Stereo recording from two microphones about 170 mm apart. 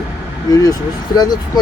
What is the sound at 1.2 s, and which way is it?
Speech, 25° left (ahead or behind).